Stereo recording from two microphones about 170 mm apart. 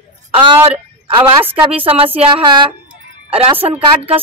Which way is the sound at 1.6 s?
35° right (ahead or behind).